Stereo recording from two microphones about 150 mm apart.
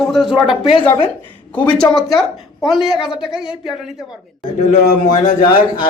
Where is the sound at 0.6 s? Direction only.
35° left (ahead or behind).